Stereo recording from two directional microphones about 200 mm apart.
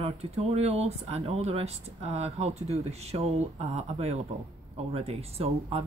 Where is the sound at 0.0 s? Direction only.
30° right (ahead or behind).